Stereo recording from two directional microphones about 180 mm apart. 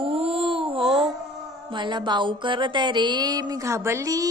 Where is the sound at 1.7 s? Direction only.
25° right (ahead or behind).